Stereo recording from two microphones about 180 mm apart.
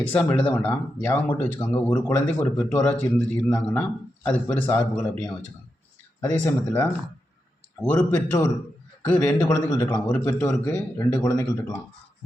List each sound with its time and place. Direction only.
0.0 s a man's voice: 10° left (ahead or behind)